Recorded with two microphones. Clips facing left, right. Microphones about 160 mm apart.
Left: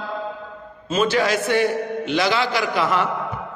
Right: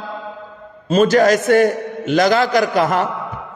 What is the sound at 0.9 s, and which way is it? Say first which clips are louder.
A man's voice: right 7 dB; 45° right (ahead or behind).